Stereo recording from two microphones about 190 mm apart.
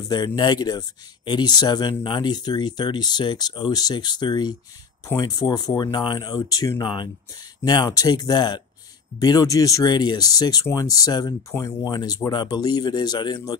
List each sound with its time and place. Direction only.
0.4 s speech: 20° left (ahead or behind)